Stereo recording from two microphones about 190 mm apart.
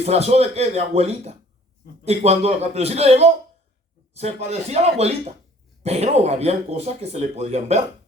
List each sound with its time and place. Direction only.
0.0 s speech: 35° right (ahead or behind)